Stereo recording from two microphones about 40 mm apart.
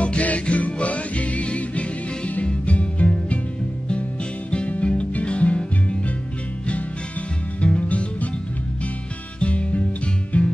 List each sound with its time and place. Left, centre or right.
0.0 s music: left
4.5 s music: left
7.6 s music: left
9.4 s music: left